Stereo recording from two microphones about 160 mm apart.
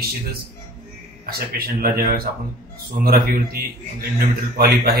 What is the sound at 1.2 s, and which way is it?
Speech, 70° right (ahead or behind).